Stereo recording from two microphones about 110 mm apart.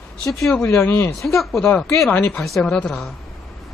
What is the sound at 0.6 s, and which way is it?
Speech, 20° left (ahead or behind).